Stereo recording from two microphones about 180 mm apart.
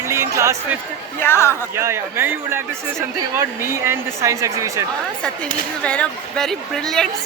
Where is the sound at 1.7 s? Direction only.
15° right (ahead or behind).